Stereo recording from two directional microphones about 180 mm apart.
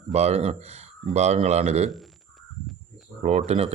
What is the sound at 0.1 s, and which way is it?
A man's voice, 35° right (ahead or behind).